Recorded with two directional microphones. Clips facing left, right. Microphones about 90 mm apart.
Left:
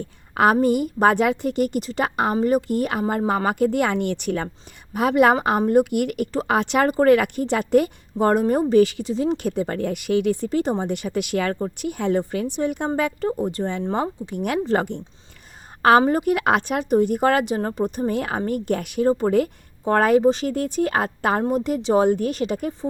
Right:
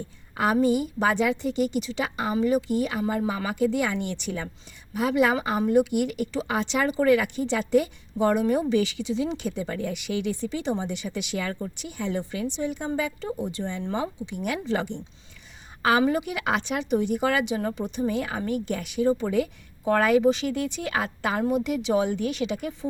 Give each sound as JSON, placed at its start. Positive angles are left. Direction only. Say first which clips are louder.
{"t": 0.3, "sound": "a woman's voice", "louder": "left 5 dB", "side_deg": 55}